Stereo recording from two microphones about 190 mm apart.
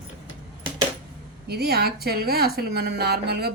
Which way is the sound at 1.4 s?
55° right (ahead or behind).